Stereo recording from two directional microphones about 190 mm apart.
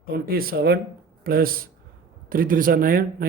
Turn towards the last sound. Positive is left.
turn(degrees=-50)  # may be behind; listen again after turning